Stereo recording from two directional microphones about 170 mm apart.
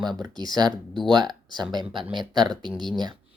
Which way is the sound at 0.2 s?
25° right (ahead or behind).